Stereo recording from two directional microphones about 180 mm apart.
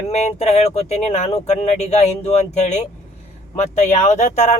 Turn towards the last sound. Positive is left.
turn(degrees=40)  # may be behind; listen again after turning